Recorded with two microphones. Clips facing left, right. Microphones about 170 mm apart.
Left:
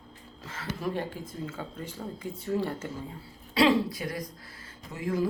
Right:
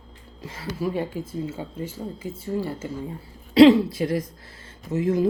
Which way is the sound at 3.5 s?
25° right (ahead or behind).